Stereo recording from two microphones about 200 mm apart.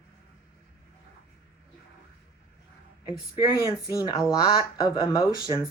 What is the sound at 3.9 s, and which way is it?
Speech, 20° left (ahead or behind).